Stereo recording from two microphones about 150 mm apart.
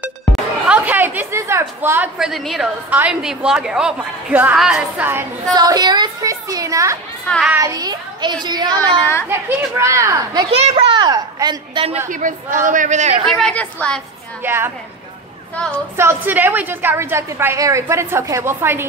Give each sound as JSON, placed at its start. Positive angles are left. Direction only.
{"t": 0.7, "sound": "a woman's voice", "side_deg": -10}
{"t": 5.5, "sound": "a sound", "side_deg": -25}
{"t": 7.2, "sound": "a woman's voice", "side_deg": 0}
{"t": 7.5, "sound": "child singing", "side_deg": -25}
{"t": 9.3, "sound": "child singing", "side_deg": -15}
{"t": 10.5, "sound": "a child's voice", "side_deg": -45}
{"t": 12.1, "sound": "speech", "side_deg": -60}
{"t": 13.2, "sound": "a woman's voice", "side_deg": 5}
{"t": 14.4, "sound": "a woman's voice", "side_deg": -15}
{"t": 16.0, "sound": "a woman's voice", "side_deg": -15}